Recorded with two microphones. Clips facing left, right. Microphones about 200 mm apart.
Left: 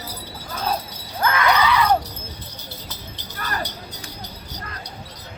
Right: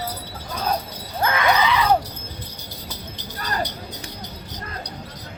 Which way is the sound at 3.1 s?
15° right (ahead or behind).